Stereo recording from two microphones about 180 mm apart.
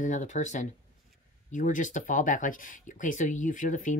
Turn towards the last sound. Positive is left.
turn(degrees=45)  # may be behind; listen again after turning